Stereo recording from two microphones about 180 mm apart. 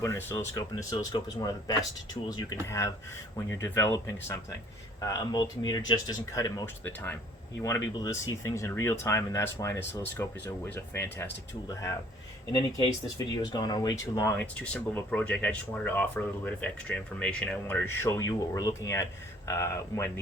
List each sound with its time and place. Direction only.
0.0 s speech: 15° left (ahead or behind)